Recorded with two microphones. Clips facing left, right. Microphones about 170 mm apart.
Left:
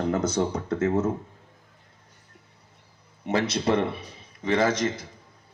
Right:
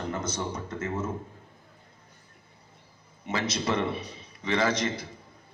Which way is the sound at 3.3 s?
60° left (ahead or behind).